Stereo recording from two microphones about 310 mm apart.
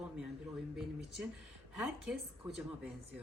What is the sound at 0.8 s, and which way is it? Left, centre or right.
Speech, centre.